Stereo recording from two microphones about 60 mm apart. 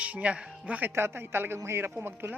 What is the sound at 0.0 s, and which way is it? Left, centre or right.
Speech, right.